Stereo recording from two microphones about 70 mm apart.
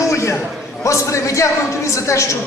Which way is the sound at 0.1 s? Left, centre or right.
Left.